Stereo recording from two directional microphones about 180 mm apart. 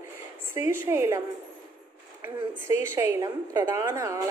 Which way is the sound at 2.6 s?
15° right (ahead or behind).